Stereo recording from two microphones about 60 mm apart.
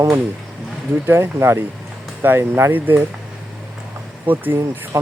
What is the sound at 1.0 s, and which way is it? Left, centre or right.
Speech, right.